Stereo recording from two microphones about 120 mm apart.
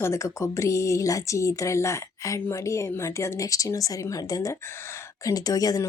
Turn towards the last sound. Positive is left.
turn(degrees=30)  # may be behind; listen again after turning